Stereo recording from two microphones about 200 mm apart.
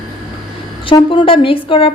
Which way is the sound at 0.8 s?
25° left (ahead or behind).